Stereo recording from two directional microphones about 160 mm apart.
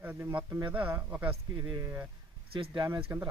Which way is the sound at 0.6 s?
30° right (ahead or behind).